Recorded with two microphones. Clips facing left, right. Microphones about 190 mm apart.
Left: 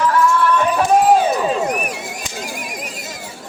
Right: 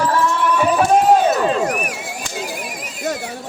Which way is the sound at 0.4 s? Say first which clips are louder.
Left 1 dB; 10° right (ahead or behind).